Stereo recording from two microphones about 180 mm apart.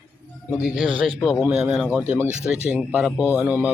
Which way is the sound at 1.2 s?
Centre (ahead or behind).